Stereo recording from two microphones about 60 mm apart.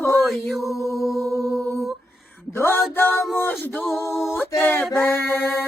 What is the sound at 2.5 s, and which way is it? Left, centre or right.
Mantra, left.